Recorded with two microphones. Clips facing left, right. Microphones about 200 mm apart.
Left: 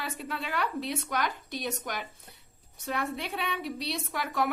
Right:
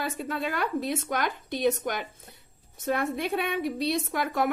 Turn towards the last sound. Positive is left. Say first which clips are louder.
# right 4 dB
turn(degrees=-50)  # may be behind; listen again after turning